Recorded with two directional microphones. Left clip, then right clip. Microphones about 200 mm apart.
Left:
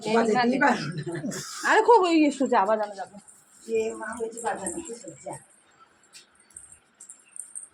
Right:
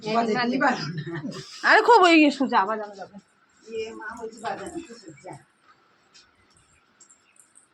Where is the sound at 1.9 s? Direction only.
50° right (ahead or behind).